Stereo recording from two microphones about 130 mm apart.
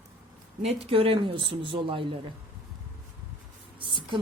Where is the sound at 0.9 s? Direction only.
45° right (ahead or behind).